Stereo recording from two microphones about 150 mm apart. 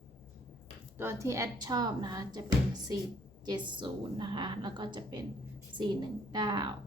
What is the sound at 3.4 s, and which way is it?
A woman's voice, 30° right (ahead or behind).